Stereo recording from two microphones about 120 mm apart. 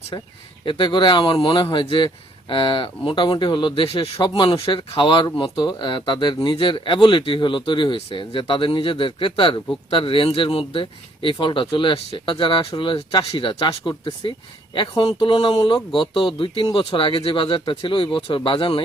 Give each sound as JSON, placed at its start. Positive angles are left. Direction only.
{"t": 0.6, "sound": "speech", "side_deg": 40}